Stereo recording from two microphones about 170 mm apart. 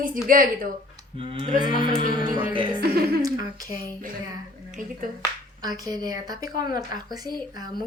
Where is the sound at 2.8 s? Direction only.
65° right (ahead or behind).